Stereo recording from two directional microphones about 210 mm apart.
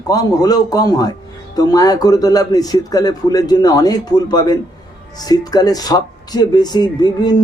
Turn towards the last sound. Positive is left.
turn(degrees=20)  # may be behind; listen again after turning